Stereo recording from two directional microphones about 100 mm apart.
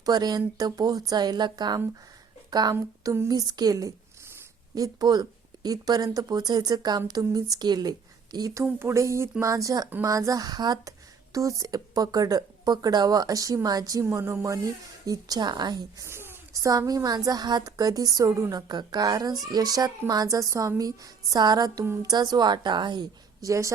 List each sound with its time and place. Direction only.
0.0 s a woman's voice: 45° right (ahead or behind)
16.0 s a woman's voice: 25° right (ahead or behind); by 23.5 s 45° right (ahead or behind)
23.5 s a woman's voice: 30° right (ahead or behind)